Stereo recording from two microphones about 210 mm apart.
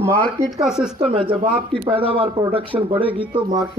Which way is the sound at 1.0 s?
25° right (ahead or behind).